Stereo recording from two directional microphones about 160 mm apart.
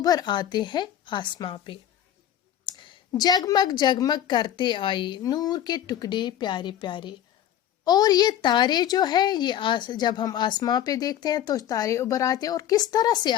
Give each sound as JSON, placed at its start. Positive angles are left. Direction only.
{"t": 0.0, "sound": "a woman's voice", "side_deg": 25}